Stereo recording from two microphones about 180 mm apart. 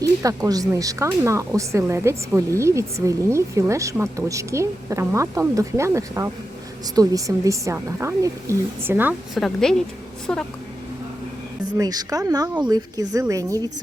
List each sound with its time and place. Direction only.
0.0 s speech: 20° right (ahead or behind)
9.4 s a woman's voice: 5° left (ahead or behind)
11.8 s speech: 20° right (ahead or behind)